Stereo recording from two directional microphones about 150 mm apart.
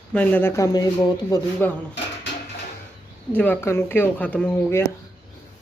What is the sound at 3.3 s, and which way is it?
Speech, 10° left (ahead or behind).